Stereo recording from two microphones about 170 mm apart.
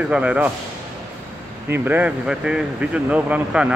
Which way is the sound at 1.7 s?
10° right (ahead or behind).